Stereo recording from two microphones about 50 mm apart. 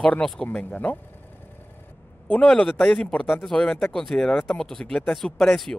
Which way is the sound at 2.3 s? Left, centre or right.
Left.